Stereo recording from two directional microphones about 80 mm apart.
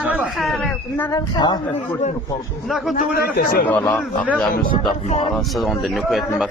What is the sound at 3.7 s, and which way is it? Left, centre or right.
Speech, centre.